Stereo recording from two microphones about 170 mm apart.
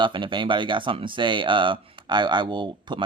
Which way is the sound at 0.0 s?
30° right (ahead or behind).